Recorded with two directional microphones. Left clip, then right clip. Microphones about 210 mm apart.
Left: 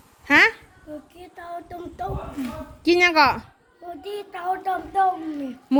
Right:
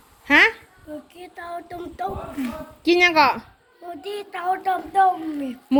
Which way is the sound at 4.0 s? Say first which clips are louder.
Right 2 dB; 15° left (ahead or behind).